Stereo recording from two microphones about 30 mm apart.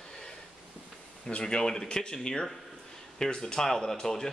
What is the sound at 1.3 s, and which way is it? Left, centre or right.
Speech, left.